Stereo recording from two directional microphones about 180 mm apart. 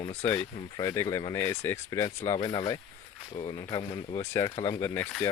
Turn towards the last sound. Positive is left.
turn(degrees=15)  # may be behind; listen again after turning